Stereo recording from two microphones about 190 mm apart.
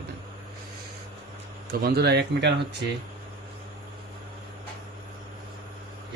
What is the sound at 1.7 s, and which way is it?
Speech, 55° right (ahead or behind).